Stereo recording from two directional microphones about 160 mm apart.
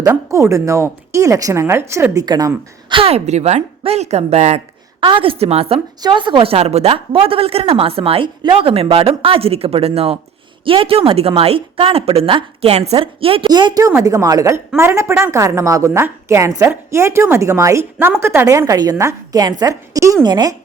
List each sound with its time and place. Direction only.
0.0 s speech: 20° right (ahead or behind)
2.9 s a woman's voice: 35° right (ahead or behind)
4.9 s a woman's voice: 30° right (ahead or behind)